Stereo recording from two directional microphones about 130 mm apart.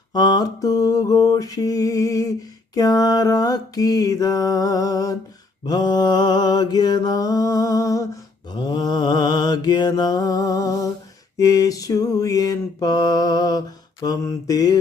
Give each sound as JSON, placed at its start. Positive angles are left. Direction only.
{"t": 0.1, "sound": "mantra", "side_deg": 30}